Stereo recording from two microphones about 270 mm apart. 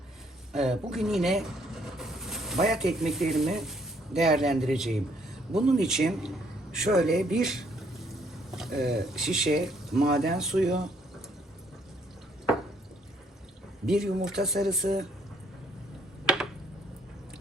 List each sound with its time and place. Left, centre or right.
0.5 s a man's voice: centre
13.8 s speech: centre
16.2 s a sound: centre